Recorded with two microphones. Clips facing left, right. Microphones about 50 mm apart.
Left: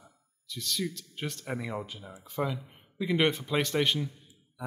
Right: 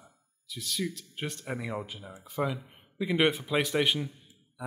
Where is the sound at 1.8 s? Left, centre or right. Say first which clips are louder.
Even; centre.